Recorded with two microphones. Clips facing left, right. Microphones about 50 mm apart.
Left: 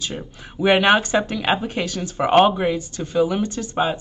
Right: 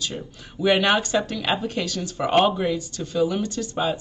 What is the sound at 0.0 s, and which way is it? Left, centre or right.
Speech, left.